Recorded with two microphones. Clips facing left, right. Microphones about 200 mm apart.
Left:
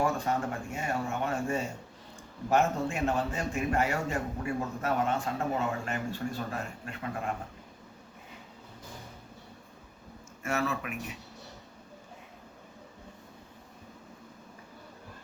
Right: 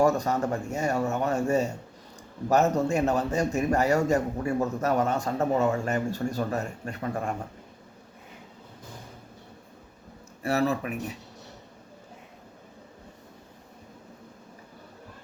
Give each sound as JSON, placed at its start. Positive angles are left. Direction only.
{"t": 0.0, "sound": "a man's voice", "side_deg": -40}
{"t": 10.4, "sound": "a man's voice", "side_deg": -35}